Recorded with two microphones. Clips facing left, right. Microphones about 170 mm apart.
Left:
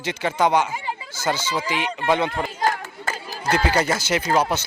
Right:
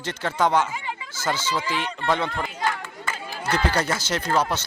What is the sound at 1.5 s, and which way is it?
Speech, 15° left (ahead or behind).